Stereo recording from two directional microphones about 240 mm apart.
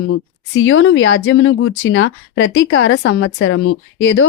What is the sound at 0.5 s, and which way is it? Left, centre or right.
Speech, left.